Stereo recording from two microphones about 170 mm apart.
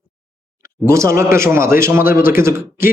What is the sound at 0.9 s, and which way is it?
A man's voice, 15° right (ahead or behind).